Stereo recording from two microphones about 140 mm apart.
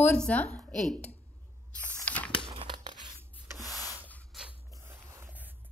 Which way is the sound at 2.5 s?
35° right (ahead or behind).